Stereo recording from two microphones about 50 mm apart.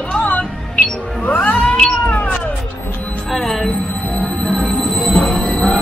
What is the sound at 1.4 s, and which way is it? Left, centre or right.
Cat, left.